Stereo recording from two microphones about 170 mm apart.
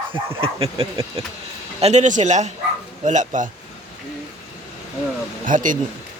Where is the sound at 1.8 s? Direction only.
45° right (ahead or behind).